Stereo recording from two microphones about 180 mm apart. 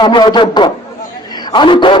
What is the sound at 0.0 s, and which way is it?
Speech, 25° left (ahead or behind).